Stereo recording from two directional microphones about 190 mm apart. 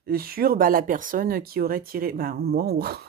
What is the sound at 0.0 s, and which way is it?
Speech, 50° right (ahead or behind).